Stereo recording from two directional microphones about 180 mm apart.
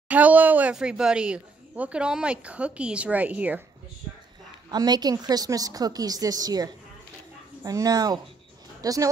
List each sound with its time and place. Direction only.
0.1 s a woman's voice: 10° right (ahead or behind)
4.6 s a woman's voice: 20° right (ahead or behind)